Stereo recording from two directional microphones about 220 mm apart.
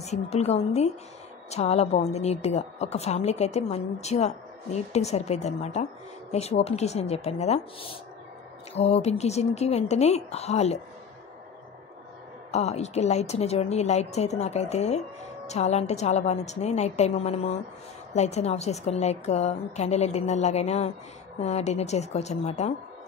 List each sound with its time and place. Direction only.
0.0 s a woman's voice: 30° left (ahead or behind)
12.4 s a woman's voice: 30° left (ahead or behind)